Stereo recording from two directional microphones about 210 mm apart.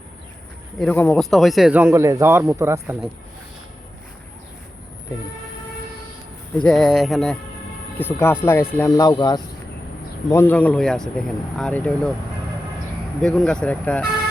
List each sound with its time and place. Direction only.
0.8 s speech: 5° left (ahead or behind); by 3.1 s 10° right (ahead or behind)
6.6 s speech: 5° left (ahead or behind)
13.2 s speech: 5° left (ahead or behind)